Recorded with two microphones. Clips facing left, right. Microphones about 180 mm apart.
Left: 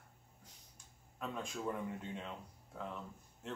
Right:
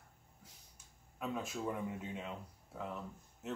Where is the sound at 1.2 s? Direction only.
5° right (ahead or behind).